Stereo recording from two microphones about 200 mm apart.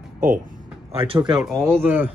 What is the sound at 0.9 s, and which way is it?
Speech, 25° right (ahead or behind).